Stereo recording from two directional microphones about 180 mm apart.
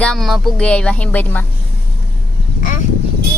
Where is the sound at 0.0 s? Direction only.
Centre (ahead or behind).